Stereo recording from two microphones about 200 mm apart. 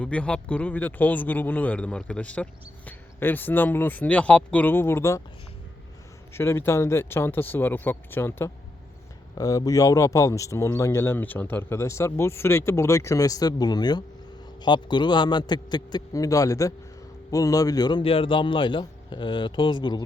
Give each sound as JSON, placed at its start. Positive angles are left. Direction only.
{"t": 0.0, "sound": "a man's voice", "side_deg": 5}
{"t": 6.3, "sound": "a man's voice", "side_deg": 10}